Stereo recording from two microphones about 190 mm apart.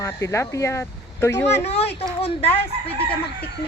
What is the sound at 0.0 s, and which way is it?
Speech, 15° left (ahead or behind).